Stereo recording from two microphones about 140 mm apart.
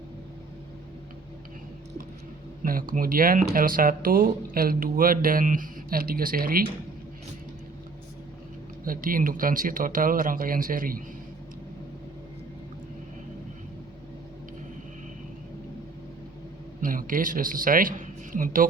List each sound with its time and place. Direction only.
2.9 s speech: 90° right
8.8 s speech: 90° right
16.8 s speech: 80° right